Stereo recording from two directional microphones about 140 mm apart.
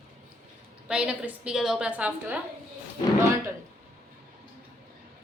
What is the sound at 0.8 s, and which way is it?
A woman's voice, 5° right (ahead or behind).